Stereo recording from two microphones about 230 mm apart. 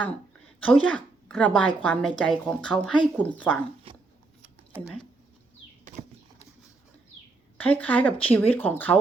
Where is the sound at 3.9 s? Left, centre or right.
Right.